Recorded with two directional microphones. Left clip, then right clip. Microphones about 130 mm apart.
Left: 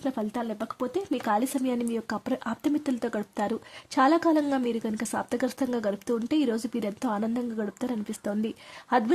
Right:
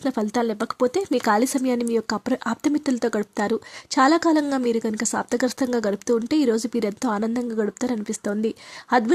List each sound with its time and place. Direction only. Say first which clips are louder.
0.0 s speech: right 8 dB; 45° right (ahead or behind); by 9.1 s 30° right (ahead or behind)